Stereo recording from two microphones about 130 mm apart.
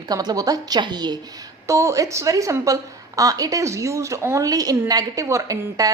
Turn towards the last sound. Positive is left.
turn(degrees=-25)  # may be behind; listen again after turning